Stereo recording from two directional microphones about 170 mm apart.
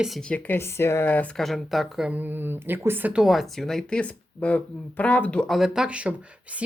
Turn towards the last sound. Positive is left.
turn(degrees=-10)  # may be behind; listen again after turning